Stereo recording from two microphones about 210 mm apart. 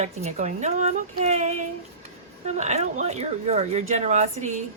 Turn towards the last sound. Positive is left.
turn(degrees=-35)  # may be behind; listen again after turning